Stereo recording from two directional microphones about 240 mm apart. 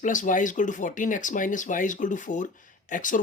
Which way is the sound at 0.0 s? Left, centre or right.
Left.